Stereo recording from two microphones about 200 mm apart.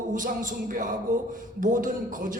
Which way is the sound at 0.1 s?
40° right (ahead or behind).